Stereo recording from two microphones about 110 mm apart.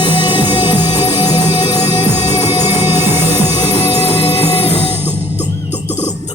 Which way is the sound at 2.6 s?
20° right (ahead or behind).